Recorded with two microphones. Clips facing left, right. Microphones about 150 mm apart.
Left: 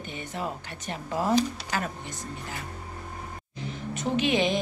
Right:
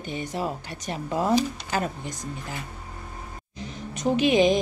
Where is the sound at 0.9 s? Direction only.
15° right (ahead or behind).